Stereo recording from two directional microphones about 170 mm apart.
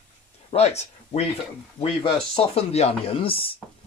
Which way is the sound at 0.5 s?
40° left (ahead or behind).